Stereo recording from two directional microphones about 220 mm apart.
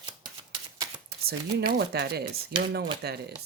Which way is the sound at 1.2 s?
45° right (ahead or behind).